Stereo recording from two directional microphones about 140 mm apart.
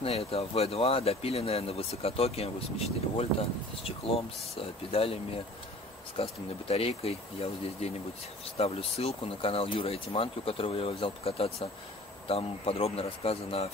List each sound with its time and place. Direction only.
0.0 s speech: 45° left (ahead or behind)